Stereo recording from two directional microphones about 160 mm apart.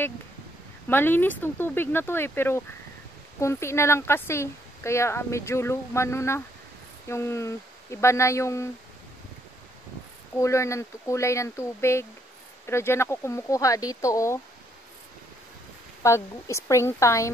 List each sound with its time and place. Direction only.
0.8 s speech: 15° left (ahead or behind)
10.4 s speech: 20° left (ahead or behind)
16.0 s speech: 20° left (ahead or behind)